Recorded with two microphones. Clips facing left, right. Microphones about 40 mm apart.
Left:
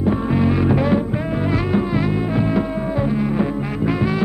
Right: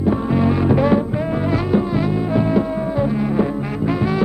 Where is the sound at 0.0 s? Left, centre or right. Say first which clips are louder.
Right 1 dB; centre.